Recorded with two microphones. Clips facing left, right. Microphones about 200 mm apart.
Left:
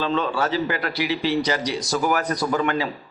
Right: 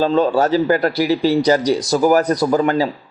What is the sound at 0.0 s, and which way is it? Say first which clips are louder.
A man's voice: right 8 dB; 40° right (ahead or behind).